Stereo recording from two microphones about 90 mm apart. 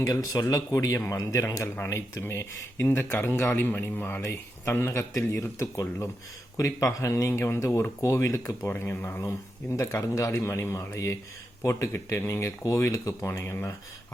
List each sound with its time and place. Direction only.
0.0 s speech: 40° left (ahead or behind)
6.7 s speech: 35° left (ahead or behind)